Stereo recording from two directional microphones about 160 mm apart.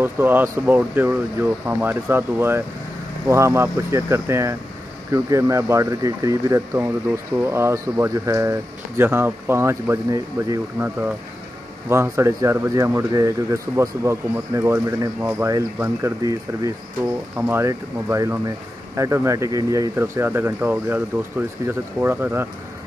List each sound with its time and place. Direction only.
0.0 s speech: 15° right (ahead or behind)
11.9 s speech: 15° right (ahead or behind)